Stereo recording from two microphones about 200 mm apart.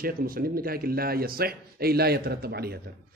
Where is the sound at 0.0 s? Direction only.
45° right (ahead or behind).